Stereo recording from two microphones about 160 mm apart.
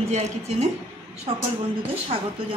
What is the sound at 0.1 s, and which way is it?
Speech, 45° right (ahead or behind).